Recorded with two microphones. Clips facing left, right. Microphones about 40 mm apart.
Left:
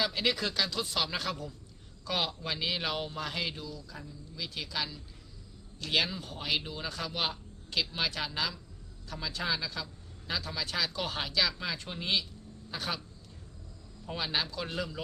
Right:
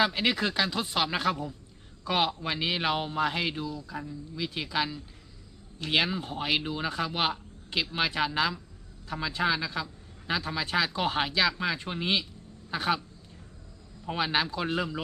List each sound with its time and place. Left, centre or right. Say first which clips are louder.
0.0 s a man's voice: right 5 dB; right
14.1 s a man's voice: right 6 dB; right